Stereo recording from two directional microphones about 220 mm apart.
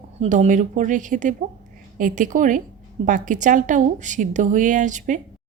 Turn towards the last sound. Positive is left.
turn(degrees=-35)  # may be behind; listen again after turning